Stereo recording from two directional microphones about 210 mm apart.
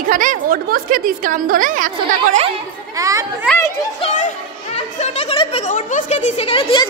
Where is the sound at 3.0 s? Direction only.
15° right (ahead or behind).